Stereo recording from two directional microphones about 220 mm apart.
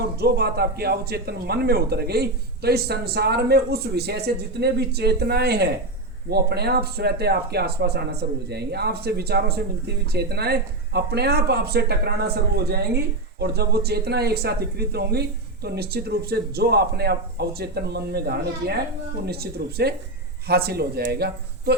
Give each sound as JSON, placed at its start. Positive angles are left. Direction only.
{"t": 0.2, "sound": "speech", "side_deg": -45}